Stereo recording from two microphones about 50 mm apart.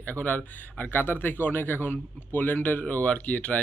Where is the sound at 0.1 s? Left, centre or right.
Left.